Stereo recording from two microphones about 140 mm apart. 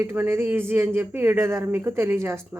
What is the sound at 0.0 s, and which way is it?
Speech, 15° right (ahead or behind).